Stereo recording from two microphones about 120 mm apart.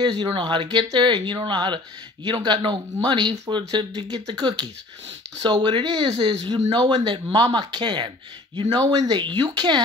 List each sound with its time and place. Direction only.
0.0 s speech: 40° right (ahead or behind)